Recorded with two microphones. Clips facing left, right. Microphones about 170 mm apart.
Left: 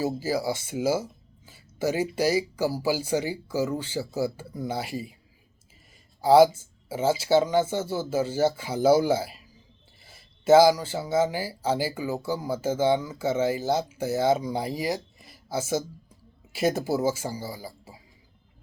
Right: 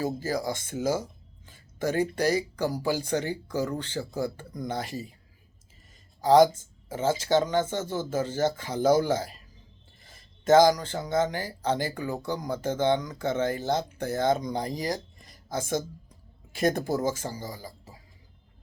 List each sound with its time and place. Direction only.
0.0 s speech: 10° left (ahead or behind)
6.2 s speech: 10° left (ahead or behind)